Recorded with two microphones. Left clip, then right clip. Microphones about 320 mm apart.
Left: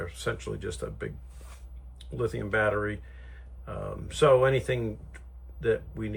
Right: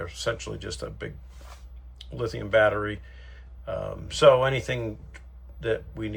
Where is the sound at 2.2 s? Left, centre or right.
Centre.